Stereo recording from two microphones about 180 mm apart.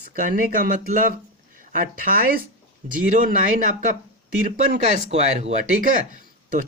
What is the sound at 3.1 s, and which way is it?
Speech, 50° right (ahead or behind).